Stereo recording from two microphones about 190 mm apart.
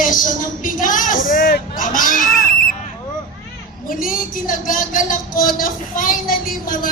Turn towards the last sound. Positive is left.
turn(degrees=45)  # may be behind; listen again after turning